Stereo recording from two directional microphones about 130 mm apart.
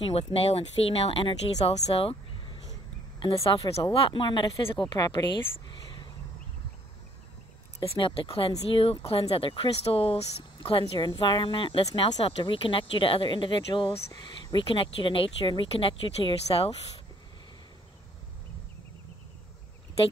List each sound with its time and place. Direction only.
0.1 s speech: 50° left (ahead or behind)
3.3 s speech: 30° left (ahead or behind)
3.7 s speech: 45° left (ahead or behind)
5.7 s a sound: 35° left (ahead or behind)
7.8 s speech: 45° left (ahead or behind)